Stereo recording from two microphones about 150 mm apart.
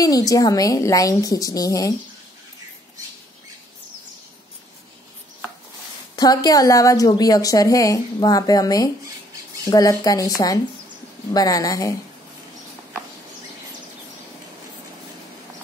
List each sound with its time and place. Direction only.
0.0 s a woman's voice: 25° left (ahead or behind)
6.1 s a woman's voice: 25° left (ahead or behind)